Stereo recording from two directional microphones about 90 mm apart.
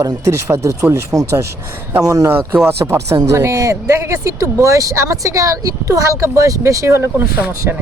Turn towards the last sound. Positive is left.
turn(degrees=-25)  # may be behind; listen again after turning